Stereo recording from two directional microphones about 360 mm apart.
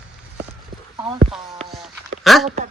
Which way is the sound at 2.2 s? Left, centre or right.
Centre.